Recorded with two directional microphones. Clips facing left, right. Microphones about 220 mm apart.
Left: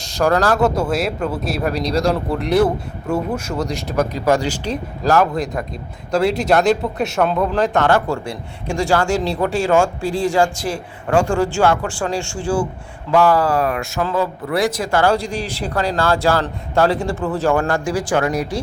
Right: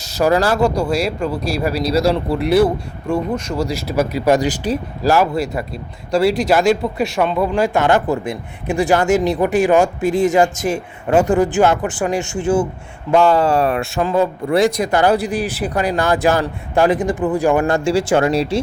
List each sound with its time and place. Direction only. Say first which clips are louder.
0.2 s speech: right 1 dB; 5° right (ahead or behind)
3.1 s speech: right 1 dB; 5° left (ahead or behind)
3.7 s speech: right 1 dB; 10° right (ahead or behind); by 18.6 s 25° right (ahead or behind)